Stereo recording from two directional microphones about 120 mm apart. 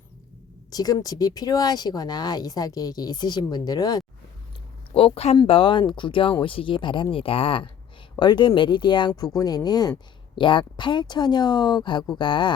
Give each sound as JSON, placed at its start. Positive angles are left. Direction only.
{"t": 0.7, "sound": "speech", "side_deg": 30}
{"t": 4.9, "sound": "speech", "side_deg": 55}
{"t": 5.5, "sound": "speech", "side_deg": 45}